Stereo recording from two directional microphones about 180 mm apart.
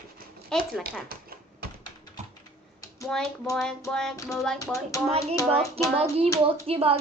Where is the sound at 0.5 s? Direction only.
5° left (ahead or behind).